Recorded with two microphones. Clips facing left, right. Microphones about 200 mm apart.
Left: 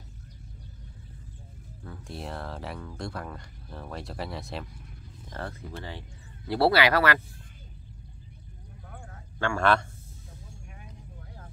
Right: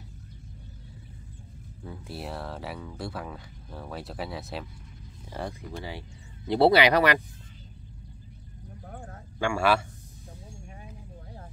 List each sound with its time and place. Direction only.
1.9 s speech: 5° right (ahead or behind)
5.3 s speech: 15° right (ahead or behind)
8.8 s a sound: 40° right (ahead or behind)
9.4 s speech: 10° right (ahead or behind)